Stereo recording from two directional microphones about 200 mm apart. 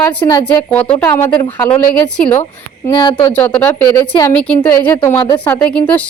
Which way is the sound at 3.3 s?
10° left (ahead or behind).